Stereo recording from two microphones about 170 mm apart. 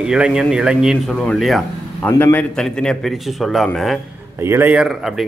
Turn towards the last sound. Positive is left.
turn(degrees=0)  # may be behind; listen again after turning